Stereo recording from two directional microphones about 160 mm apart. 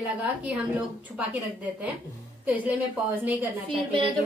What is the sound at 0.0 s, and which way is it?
A woman's voice, 10° right (ahead or behind).